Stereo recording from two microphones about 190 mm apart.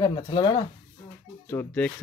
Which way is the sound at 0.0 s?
25° left (ahead or behind).